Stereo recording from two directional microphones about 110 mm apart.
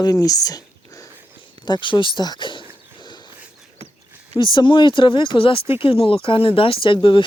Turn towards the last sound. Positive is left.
turn(degrees=50)  # may be behind; listen again after turning